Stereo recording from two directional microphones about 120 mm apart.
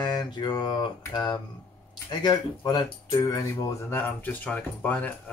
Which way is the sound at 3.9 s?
15° left (ahead or behind).